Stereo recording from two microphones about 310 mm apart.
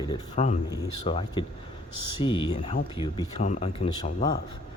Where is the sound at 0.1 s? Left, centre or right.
Left.